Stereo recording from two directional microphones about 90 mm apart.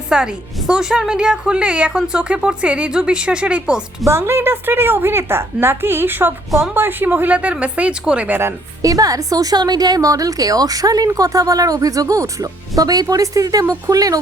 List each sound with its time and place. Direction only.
0.1 s a woman's voice: 10° right (ahead or behind)
4.0 s a woman's voice: 30° right (ahead or behind); by 8.4 s 15° right (ahead or behind)
8.4 s a woman's voice: 35° right (ahead or behind)